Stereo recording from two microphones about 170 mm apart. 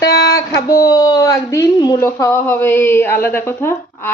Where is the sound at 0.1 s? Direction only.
70° left (ahead or behind).